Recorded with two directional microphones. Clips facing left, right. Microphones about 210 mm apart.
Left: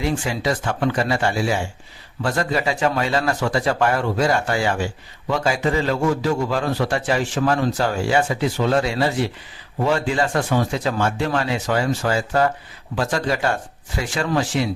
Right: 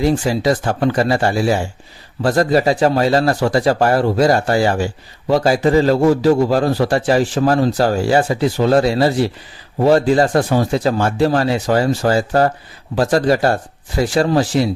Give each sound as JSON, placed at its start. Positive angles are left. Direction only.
{"t": 0.0, "sound": "a man's voice", "side_deg": -35}